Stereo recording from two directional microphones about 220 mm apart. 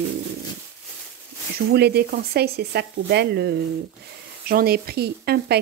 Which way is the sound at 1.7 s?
45° right (ahead or behind).